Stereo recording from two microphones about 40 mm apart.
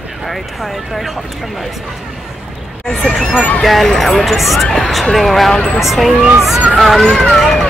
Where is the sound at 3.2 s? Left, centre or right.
Centre.